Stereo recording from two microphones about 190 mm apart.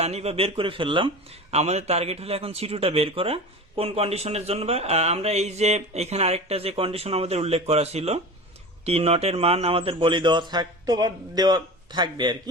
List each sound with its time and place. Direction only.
0.0 s a man's voice: 35° right (ahead or behind)